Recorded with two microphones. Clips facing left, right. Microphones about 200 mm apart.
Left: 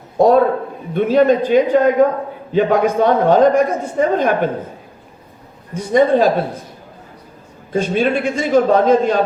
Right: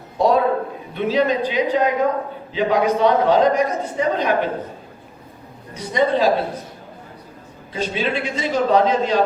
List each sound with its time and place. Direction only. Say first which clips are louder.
0.2 s a man's voice: left 5 dB; 50° left (ahead or behind)
5.7 s a man's voice: left 6 dB; 50° left (ahead or behind)
7.7 s a man's voice: left 7 dB; 50° left (ahead or behind)